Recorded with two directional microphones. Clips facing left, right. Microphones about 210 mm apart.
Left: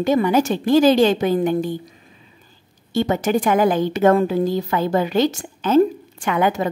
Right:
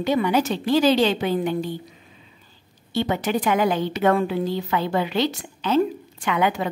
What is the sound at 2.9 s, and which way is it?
A woman's voice, 45° left (ahead or behind).